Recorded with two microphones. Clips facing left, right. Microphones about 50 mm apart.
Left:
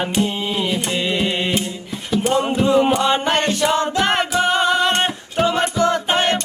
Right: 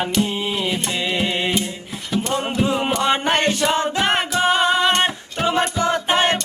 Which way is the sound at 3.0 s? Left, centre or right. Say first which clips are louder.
Left 1 dB; right.